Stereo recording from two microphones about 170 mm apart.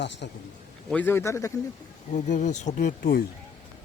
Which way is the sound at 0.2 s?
90° left.